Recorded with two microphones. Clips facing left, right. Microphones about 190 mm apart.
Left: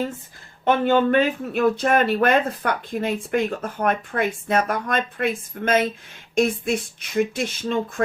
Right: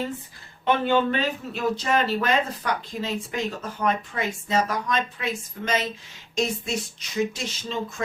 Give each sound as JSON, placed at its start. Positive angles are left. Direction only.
{"t": 0.6, "sound": "speech", "side_deg": 50}